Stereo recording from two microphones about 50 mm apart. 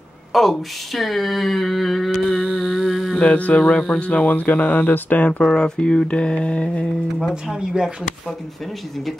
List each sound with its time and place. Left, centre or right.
0.3 s speech: centre
2.4 s humming: centre
3.2 s speech: left
3.6 s speech: centre
4.0 s speech: left
5.4 s speech: centre
7.2 s speech: centre
7.5 s speech: centre